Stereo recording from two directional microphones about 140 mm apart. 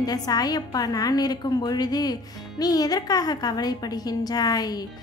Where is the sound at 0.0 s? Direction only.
25° left (ahead or behind).